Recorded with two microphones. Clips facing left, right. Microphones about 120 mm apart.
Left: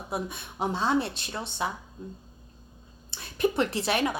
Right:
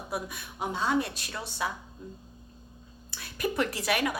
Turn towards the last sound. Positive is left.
turn(degrees=25)  # may be behind; listen again after turning